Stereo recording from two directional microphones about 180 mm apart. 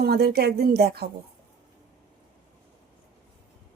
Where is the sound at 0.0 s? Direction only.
60° right (ahead or behind).